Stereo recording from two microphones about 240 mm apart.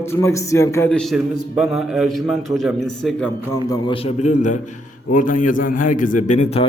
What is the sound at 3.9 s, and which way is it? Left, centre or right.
A man's voice, left.